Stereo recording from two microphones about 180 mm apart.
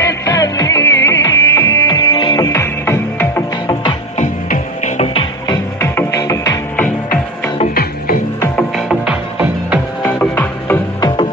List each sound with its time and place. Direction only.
0.0 s music: 20° left (ahead or behind)
4.2 s music: 40° left (ahead or behind)
5.8 s music: 15° left (ahead or behind)
8.7 s music: 5° right (ahead or behind)
10.0 s music: 10° left (ahead or behind)
11.0 s music: 25° left (ahead or behind)